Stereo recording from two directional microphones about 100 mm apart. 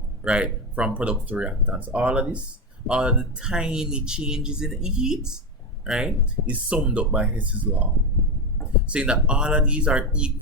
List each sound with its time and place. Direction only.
0.2 s speech: 10° right (ahead or behind)
8.9 s speech: 10° right (ahead or behind)